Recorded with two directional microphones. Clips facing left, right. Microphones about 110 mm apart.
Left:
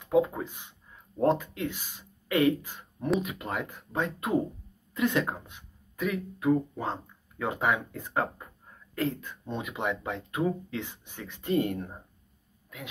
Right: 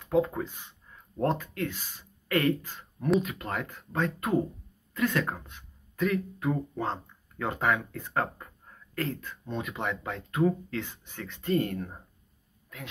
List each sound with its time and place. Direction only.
0.0 s speech: 15° left (ahead or behind)